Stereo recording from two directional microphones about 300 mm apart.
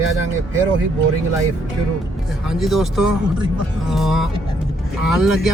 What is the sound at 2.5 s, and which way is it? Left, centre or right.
Speech, centre.